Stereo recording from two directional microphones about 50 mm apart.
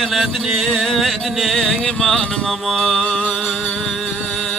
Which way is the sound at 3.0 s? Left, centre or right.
Centre.